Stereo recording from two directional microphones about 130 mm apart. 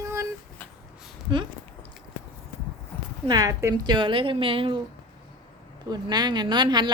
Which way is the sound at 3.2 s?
30° right (ahead or behind).